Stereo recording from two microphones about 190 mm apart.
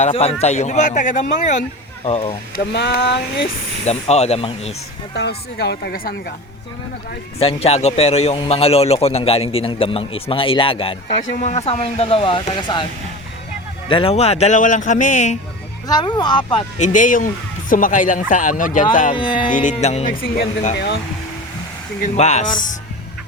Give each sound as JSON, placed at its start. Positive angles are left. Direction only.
{"t": 0.0, "sound": "a man's voice", "side_deg": 30}
{"t": 2.0, "sound": "a man's voice", "side_deg": 30}
{"t": 2.7, "sound": "speech", "side_deg": 65}
{"t": 3.8, "sound": "a man's voice", "side_deg": 35}
{"t": 5.1, "sound": "speech", "side_deg": 60}
{"t": 7.3, "sound": "a man's voice", "side_deg": 30}
{"t": 13.8, "sound": "a man's voice", "side_deg": 30}
{"t": 15.9, "sound": "speech", "side_deg": 20}
{"t": 16.7, "sound": "speech", "side_deg": 40}
{"t": 19.1, "sound": "speech", "side_deg": 25}
{"t": 19.5, "sound": "a man's voice", "side_deg": 45}
{"t": 20.2, "sound": "speech", "side_deg": 50}
{"t": 22.0, "sound": "speech", "side_deg": 35}